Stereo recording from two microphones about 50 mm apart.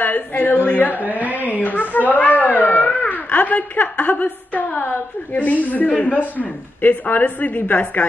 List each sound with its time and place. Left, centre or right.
0.0 s a woman's voice: left
1.0 s a woman's voice: right
1.6 s a woman's voice: left